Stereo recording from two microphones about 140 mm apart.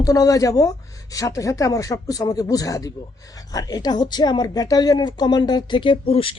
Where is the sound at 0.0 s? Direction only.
25° left (ahead or behind).